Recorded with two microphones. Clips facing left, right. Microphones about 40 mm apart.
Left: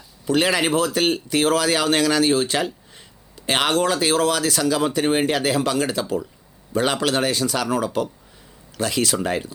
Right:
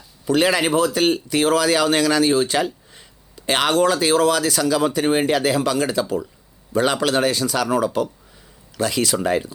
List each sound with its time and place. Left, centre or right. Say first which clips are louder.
0.3 s speech: right 2 dB; left
8.8 s speech: right 2 dB; left